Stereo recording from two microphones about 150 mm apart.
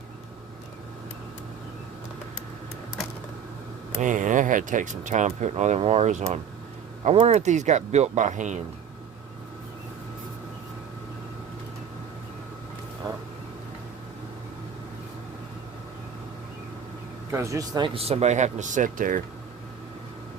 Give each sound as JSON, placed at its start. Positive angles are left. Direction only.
{"t": 4.0, "sound": "speech", "side_deg": -55}
{"t": 17.3, "sound": "speech", "side_deg": -20}
{"t": 17.8, "sound": "speech", "side_deg": -40}